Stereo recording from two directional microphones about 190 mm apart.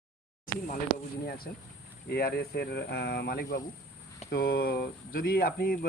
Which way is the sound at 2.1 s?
55° left (ahead or behind).